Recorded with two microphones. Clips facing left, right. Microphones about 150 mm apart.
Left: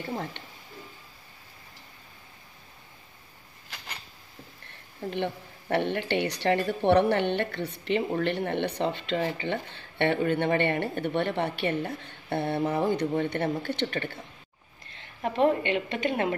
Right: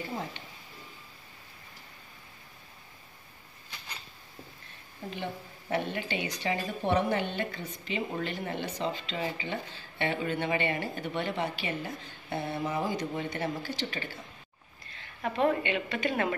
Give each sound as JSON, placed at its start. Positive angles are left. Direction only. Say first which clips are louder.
{"t": 5.1, "sound": "a woman's voice", "louder": "left 6 dB", "side_deg": 65}
{"t": 15.0, "sound": "a woman's voice", "louder": "left 4 dB", "side_deg": 25}